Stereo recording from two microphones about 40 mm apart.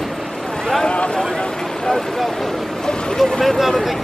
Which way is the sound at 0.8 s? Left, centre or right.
Left.